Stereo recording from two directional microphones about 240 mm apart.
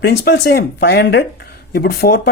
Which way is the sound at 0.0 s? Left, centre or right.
Left.